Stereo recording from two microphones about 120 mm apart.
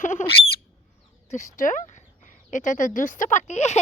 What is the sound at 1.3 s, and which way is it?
A child's voice, 90° left.